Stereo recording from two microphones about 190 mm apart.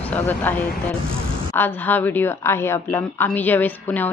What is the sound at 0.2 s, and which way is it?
Speech, 10° left (ahead or behind).